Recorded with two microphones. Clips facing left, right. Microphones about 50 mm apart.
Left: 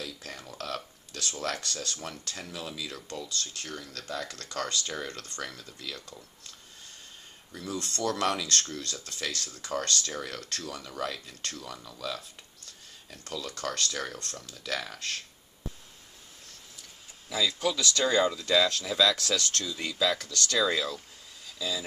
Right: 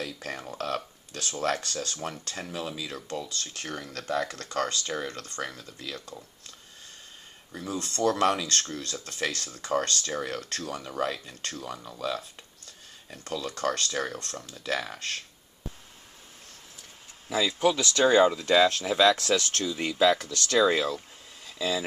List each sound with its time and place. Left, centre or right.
0.0 s speech: right
7.5 s speech: right
17.3 s speech: right